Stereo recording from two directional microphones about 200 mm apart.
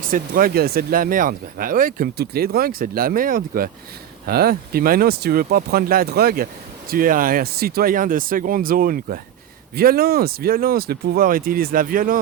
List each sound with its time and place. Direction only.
0.1 s speech: 45° right (ahead or behind)